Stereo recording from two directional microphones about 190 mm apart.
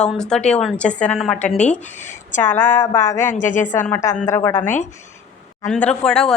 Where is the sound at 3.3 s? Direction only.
40° left (ahead or behind).